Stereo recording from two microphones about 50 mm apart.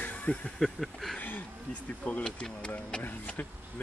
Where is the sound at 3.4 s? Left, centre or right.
Left.